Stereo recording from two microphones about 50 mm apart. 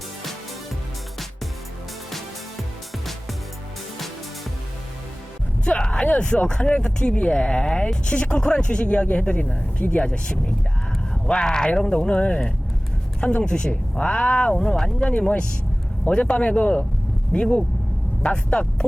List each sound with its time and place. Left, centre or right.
5.6 s speech: left